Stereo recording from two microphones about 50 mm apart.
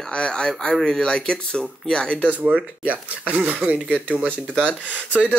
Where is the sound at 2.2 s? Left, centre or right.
Right.